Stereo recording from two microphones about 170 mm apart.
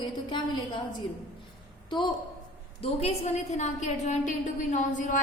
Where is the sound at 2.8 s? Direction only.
35° left (ahead or behind).